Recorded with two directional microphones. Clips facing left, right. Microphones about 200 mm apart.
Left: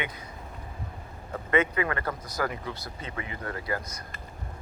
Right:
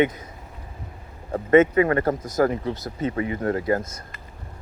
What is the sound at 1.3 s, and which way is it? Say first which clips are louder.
Speech: right 10 dB; 40° right (ahead or behind).